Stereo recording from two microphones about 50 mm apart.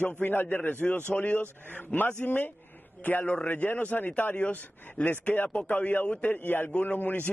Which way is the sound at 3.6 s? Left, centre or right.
Left.